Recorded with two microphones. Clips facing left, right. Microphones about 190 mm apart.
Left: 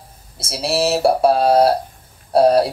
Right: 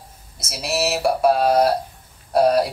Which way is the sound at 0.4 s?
30° left (ahead or behind).